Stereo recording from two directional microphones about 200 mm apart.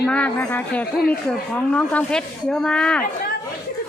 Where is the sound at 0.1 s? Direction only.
10° left (ahead or behind).